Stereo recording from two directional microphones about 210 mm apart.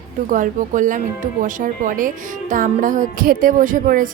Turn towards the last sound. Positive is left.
turn(degrees=-40)  # may be behind; listen again after turning